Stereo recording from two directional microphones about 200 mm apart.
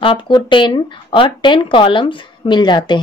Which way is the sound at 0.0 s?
25° left (ahead or behind).